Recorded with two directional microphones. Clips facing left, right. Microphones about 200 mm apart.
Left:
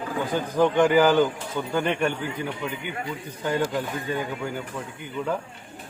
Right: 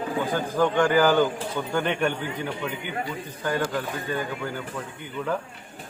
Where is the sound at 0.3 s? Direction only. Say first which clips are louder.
Left 3 dB; 15° left (ahead or behind).